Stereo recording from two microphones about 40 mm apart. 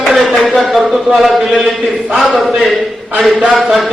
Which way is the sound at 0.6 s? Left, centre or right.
Centre.